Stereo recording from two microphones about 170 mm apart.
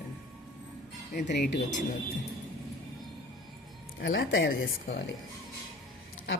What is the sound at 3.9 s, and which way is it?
Speech, 65° left (ahead or behind).